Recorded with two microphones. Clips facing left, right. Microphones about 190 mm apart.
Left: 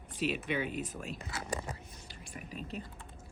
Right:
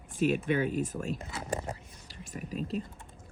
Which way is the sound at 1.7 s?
40° right (ahead or behind).